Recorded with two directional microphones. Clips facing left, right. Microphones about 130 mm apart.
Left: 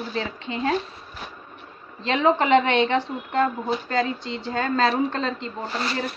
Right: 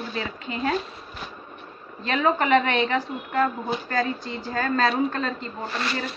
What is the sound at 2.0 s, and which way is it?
Speech, 25° left (ahead or behind).